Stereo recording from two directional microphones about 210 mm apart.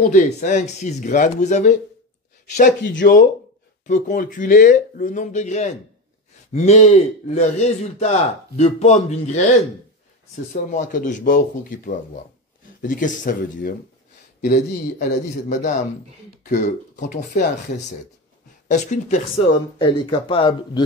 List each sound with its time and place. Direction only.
0.0 s speech: 35° left (ahead or behind)
3.0 s speech: 45° left (ahead or behind)
18.7 s speech: 35° left (ahead or behind)